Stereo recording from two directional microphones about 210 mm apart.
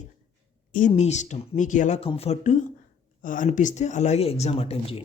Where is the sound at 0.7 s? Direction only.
35° left (ahead or behind).